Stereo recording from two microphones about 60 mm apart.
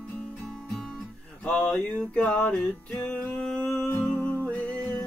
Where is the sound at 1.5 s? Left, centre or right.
Centre.